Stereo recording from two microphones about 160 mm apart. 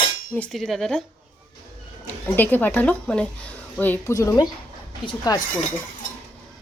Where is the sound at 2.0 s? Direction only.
10° left (ahead or behind).